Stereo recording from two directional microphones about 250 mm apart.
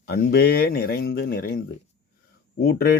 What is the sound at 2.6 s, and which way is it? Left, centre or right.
Speech, left.